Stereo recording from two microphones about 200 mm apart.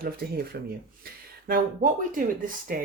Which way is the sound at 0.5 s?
50° right (ahead or behind).